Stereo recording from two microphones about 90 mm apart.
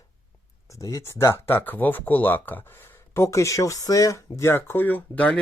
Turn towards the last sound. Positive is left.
turn(degrees=15)  # may be behind; listen again after turning